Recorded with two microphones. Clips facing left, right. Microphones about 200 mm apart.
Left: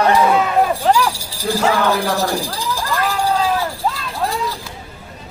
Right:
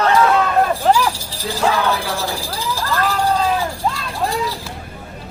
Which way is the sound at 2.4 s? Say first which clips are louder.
Left 1 dB; 15° left (ahead or behind).